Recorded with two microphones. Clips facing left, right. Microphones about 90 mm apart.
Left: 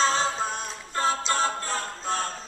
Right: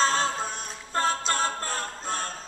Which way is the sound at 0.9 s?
45° right (ahead or behind).